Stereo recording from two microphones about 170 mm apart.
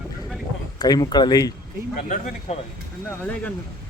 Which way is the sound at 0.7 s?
25° left (ahead or behind).